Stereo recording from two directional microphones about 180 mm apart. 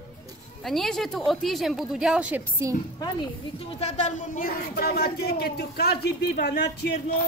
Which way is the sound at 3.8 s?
40° left (ahead or behind).